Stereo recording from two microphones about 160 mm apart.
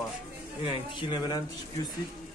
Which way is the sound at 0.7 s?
30° left (ahead or behind).